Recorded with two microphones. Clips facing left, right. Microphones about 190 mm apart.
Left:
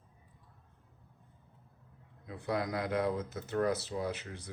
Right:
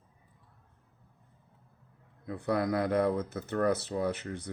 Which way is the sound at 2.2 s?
60° right (ahead or behind).